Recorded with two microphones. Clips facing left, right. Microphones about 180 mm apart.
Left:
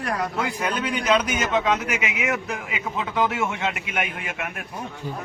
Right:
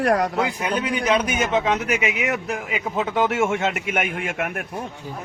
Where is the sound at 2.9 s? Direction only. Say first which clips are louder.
Right 3 dB; 45° right (ahead or behind).